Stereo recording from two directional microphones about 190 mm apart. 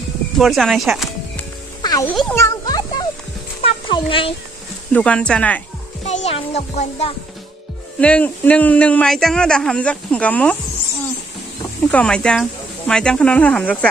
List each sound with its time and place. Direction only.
0.4 s speech: centre (ahead or behind)
1.8 s music: 20° left (ahead or behind)
2.0 s a sound: 5° left (ahead or behind); by 4.3 s 25° left (ahead or behind)
4.9 s speech: 5° left (ahead or behind)
6.0 s a child's voice: 35° left (ahead or behind)
8.0 s speech: 5° left (ahead or behind)
11.9 s speech: 5° left (ahead or behind)